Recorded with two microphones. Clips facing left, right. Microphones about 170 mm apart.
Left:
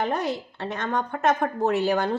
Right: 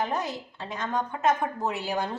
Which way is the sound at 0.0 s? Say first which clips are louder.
Left 4 dB; 65° left (ahead or behind).